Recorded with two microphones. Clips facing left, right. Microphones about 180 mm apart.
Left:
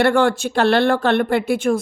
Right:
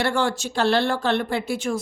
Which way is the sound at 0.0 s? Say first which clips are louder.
Left 7 dB; 60° left (ahead or behind).